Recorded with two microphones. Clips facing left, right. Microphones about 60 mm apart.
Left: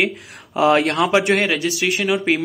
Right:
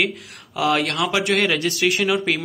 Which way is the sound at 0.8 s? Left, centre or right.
Centre.